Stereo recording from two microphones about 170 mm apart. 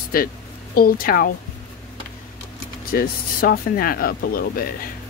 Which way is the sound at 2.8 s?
60° left (ahead or behind).